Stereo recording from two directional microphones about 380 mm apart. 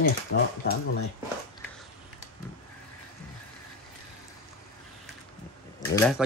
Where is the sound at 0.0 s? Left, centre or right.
Left.